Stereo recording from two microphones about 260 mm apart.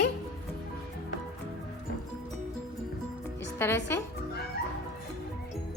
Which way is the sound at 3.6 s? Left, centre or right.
Centre.